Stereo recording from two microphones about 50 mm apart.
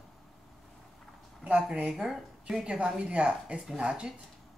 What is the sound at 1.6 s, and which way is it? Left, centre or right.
A woman's voice, right.